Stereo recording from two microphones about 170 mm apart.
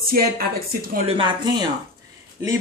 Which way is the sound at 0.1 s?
60° right (ahead or behind).